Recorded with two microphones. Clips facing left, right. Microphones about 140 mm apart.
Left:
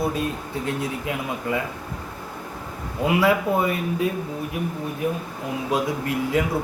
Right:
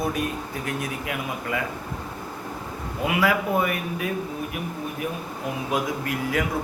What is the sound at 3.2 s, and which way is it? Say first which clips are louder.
Speech: left 2 dB; 25° left (ahead or behind).